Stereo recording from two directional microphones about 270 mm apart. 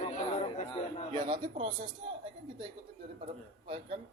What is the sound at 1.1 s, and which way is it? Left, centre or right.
A man's voice, centre.